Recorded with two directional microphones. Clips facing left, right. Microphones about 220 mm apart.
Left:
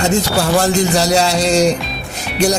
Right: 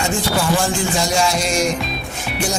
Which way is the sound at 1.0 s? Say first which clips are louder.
Left 4 dB; 70° left (ahead or behind).